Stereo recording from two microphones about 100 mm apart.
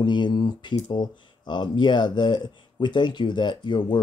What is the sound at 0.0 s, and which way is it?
Speech, 50° left (ahead or behind).